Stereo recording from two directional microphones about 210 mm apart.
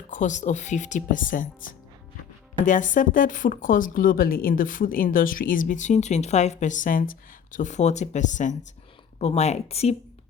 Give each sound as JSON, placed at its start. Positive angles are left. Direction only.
{"t": 0.1, "sound": "speech", "side_deg": 35}